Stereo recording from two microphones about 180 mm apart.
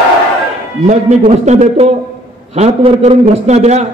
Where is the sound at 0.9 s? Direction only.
40° right (ahead or behind).